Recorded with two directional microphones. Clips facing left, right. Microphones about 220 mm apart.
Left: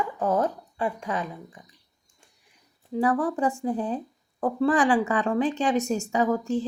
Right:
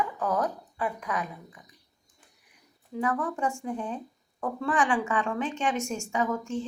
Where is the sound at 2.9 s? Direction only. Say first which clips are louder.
Left 5 dB; 35° left (ahead or behind).